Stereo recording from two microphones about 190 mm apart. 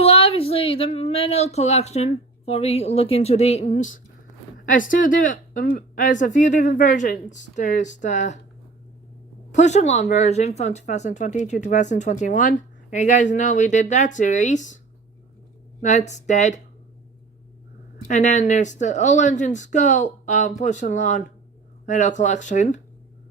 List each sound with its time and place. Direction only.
0.0 s speech: 30° left (ahead or behind)
9.5 s speech: 40° left (ahead or behind)
15.8 s speech: 35° left (ahead or behind)
18.1 s speech: 40° left (ahead or behind)